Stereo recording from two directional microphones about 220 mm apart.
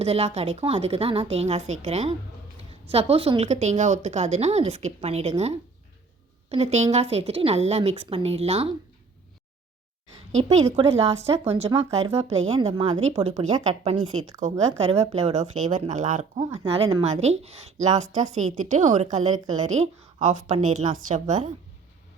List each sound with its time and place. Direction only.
0.0 s speech: 30° right (ahead or behind)
6.5 s speech: 30° right (ahead or behind)
10.3 s speech: 30° right (ahead or behind)